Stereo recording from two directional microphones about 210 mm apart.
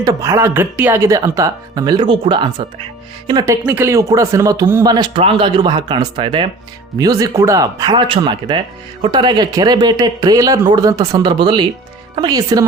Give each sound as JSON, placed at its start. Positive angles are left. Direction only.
{"t": 0.0, "sound": "speech", "side_deg": -15}